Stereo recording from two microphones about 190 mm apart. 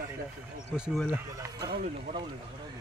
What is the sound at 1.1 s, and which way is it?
Speech, 20° right (ahead or behind).